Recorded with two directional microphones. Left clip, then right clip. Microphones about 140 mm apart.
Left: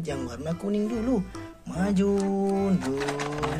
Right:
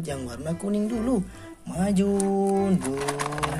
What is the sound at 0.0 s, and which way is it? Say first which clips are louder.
Music: even; 15° right (ahead or behind).